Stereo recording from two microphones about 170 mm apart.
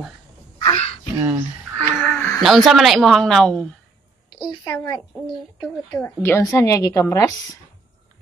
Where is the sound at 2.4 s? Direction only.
Centre (ahead or behind).